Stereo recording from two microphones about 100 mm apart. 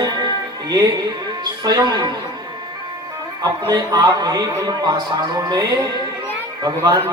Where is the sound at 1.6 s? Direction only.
45° right (ahead or behind).